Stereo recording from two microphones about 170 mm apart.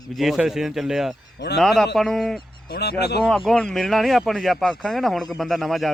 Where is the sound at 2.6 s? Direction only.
70° left (ahead or behind).